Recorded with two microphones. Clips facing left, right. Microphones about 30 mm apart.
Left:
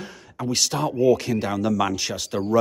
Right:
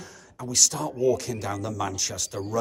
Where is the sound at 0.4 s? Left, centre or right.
Left.